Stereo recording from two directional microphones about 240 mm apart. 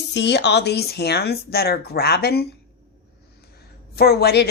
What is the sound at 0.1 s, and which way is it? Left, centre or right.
Speech, left.